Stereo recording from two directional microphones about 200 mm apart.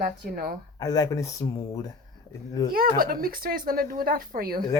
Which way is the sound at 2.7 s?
45° right (ahead or behind).